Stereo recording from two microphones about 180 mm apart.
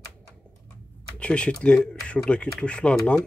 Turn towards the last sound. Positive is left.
turn(degrees=5)  # may be behind; listen again after turning